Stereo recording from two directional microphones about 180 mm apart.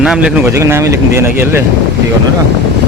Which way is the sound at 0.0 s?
5° right (ahead or behind).